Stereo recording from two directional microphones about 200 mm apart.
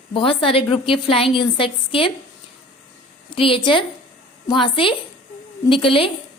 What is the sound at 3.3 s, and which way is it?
A woman's voice, 25° left (ahead or behind).